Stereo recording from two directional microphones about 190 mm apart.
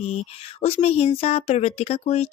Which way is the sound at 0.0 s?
35° left (ahead or behind).